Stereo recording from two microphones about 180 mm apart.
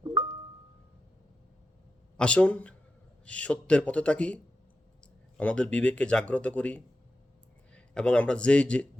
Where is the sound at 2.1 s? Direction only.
5° left (ahead or behind).